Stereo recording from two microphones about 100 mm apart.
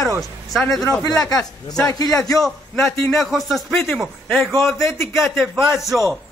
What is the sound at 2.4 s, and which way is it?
A man's voice, 5° left (ahead or behind).